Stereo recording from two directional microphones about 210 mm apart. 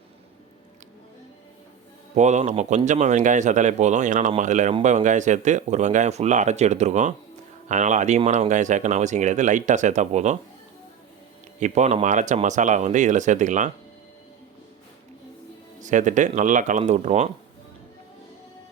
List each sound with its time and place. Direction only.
2.1 s speech: 35° right (ahead or behind)
11.6 s speech: 35° right (ahead or behind)
15.8 s speech: 35° right (ahead or behind)